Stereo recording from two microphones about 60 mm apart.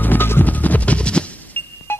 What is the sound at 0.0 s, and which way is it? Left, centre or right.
Music, left.